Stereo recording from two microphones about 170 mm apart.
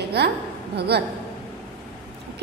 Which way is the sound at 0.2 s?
75° right (ahead or behind).